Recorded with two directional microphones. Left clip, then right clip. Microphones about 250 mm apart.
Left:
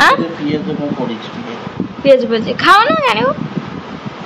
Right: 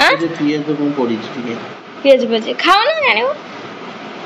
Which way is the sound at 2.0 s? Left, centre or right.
Centre.